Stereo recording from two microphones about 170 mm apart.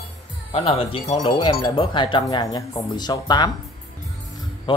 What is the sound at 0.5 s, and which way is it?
A man's voice, 35° left (ahead or behind).